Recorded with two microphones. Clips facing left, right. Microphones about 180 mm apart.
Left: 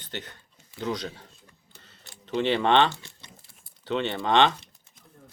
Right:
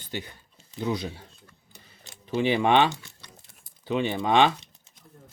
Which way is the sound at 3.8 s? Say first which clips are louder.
Right 1 dB; 10° right (ahead or behind).